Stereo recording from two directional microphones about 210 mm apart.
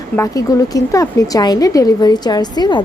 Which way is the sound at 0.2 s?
15° left (ahead or behind).